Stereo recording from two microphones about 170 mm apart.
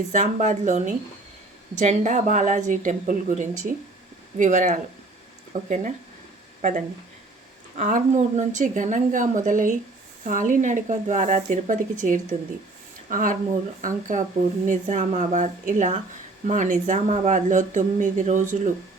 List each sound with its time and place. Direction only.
0.1 s speech: 45° right (ahead or behind)